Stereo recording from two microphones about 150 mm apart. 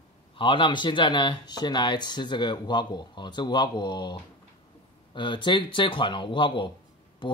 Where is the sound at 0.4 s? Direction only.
35° left (ahead or behind).